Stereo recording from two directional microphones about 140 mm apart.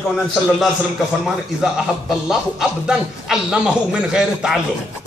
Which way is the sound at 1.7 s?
5° right (ahead or behind).